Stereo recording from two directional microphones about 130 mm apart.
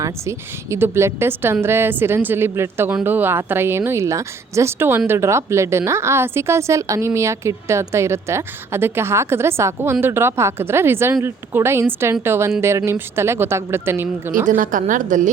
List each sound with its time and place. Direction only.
0.0 s a woman's voice: 20° right (ahead or behind)
14.4 s a woman's voice: 90° right